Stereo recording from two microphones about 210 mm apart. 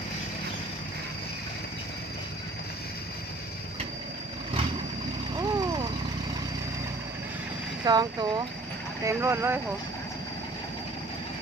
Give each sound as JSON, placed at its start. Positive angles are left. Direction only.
{"t": 5.4, "sound": "vehicle", "side_deg": -20}
{"t": 7.9, "sound": "speech", "side_deg": -20}